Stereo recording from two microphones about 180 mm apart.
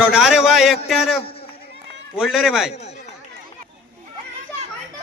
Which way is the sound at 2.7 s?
35° left (ahead or behind).